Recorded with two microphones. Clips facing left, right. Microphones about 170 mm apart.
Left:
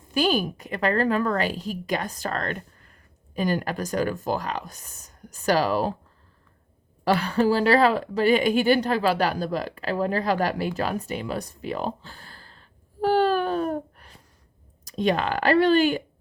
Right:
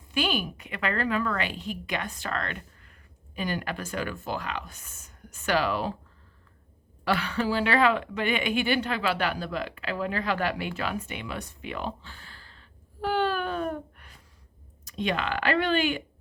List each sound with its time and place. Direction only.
0.1 s a woman's voice: 40° left (ahead or behind)
7.0 s a woman's voice: 40° left (ahead or behind)